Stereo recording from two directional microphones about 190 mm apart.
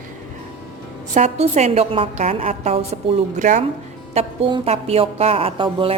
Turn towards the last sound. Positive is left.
turn(degrees=-25)  # may be behind; listen again after turning